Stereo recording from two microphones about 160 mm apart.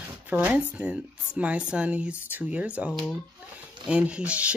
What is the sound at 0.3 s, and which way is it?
Speech, 10° right (ahead or behind).